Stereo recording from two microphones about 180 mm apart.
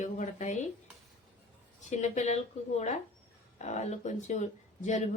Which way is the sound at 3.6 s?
40° left (ahead or behind).